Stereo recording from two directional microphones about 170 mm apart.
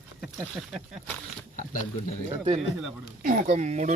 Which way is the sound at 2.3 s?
40° right (ahead or behind).